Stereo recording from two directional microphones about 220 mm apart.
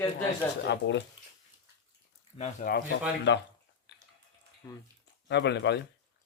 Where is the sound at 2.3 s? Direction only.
30° left (ahead or behind).